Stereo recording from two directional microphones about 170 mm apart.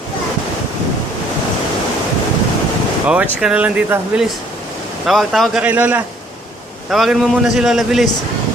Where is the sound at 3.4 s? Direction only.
5° right (ahead or behind).